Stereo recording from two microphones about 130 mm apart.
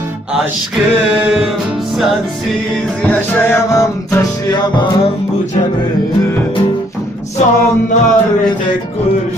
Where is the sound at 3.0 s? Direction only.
15° left (ahead or behind).